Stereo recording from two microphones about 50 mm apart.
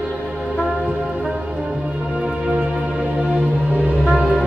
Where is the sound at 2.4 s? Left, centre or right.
Right.